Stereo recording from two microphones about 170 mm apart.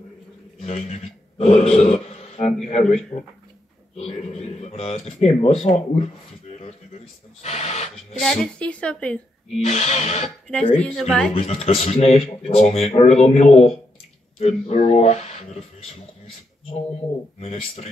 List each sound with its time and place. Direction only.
0.6 s a man's voice: 40° left (ahead or behind)
7.4 s filing: 40° left (ahead or behind)
8.2 s a woman's voice: centre (ahead or behind)
9.7 s speech: 40° left (ahead or behind)
10.5 s speech: 5° left (ahead or behind)
11.3 s speech: 40° left (ahead or behind)
17.4 s speech: 40° left (ahead or behind)